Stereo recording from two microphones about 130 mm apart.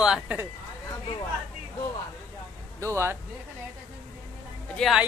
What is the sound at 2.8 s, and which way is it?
Speech, 20° right (ahead or behind).